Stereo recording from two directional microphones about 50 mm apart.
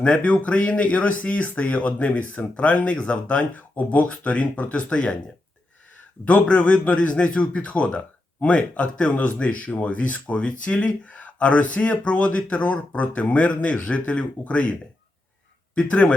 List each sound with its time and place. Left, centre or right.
0.0 s speech: left
6.2 s speech: left